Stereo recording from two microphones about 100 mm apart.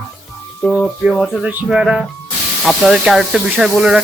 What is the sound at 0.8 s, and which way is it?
Speech, 10° right (ahead or behind).